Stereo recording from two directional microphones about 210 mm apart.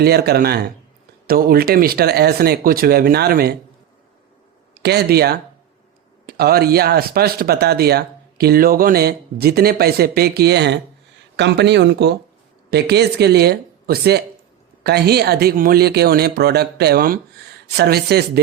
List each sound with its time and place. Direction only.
0.0 s speech: 50° right (ahead or behind)
4.7 s speech: 50° right (ahead or behind)